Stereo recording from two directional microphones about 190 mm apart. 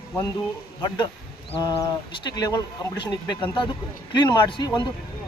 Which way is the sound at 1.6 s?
20° left (ahead or behind).